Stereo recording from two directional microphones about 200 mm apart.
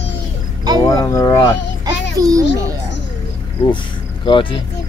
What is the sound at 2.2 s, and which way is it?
Speech, 20° right (ahead or behind).